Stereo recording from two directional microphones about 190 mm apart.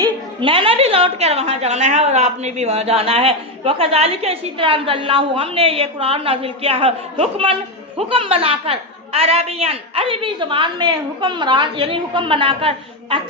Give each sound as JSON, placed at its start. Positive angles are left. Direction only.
{"t": 0.0, "sound": "a woman's voice", "side_deg": -30}